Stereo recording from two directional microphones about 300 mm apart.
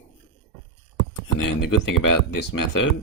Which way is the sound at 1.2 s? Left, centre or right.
Left.